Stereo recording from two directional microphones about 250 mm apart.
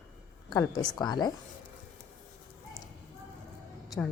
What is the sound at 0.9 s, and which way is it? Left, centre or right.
Speech, centre.